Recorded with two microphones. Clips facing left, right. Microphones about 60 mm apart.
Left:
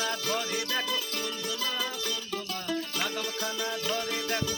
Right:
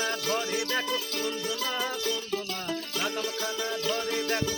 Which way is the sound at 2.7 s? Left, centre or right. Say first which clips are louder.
Even; centre.